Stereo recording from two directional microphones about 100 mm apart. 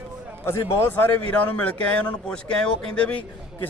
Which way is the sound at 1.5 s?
10° left (ahead or behind).